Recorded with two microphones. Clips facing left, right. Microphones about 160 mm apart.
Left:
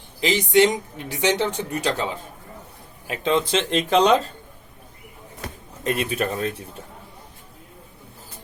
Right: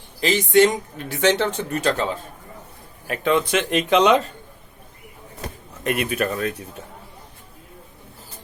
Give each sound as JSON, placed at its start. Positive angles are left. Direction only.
{"t": 0.2, "sound": "speech", "side_deg": 15}
{"t": 3.1, "sound": "speech", "side_deg": 25}
{"t": 5.8, "sound": "speech", "side_deg": 30}